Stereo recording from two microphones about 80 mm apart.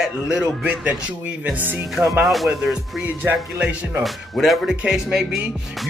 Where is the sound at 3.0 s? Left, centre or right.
Right.